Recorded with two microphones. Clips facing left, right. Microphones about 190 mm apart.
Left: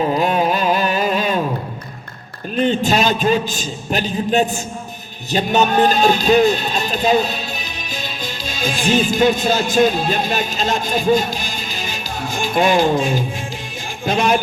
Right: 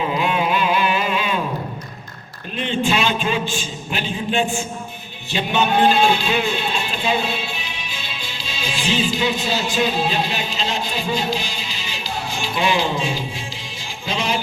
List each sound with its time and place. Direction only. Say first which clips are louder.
0.0 s carnatic music: left 4 dB; 40° left (ahead or behind)
2.6 s a man's voice: left 4 dB; 40° left (ahead or behind)